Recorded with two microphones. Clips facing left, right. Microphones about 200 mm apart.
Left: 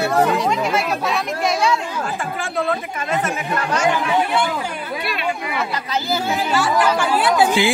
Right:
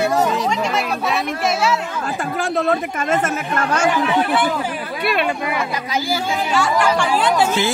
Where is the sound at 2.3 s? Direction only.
40° right (ahead or behind).